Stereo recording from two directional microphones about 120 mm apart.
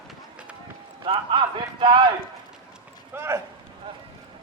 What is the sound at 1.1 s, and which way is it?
Speech, 45° right (ahead or behind).